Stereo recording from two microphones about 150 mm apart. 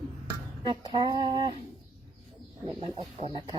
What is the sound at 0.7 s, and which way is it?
Speech, 30° right (ahead or behind).